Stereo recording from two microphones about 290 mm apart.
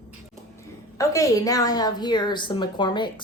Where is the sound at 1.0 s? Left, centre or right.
Centre.